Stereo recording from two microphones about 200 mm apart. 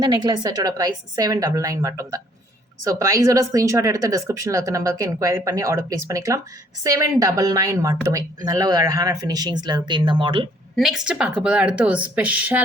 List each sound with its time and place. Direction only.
0.0 s speech: 20° right (ahead or behind)
10.8 s speech: centre (ahead or behind)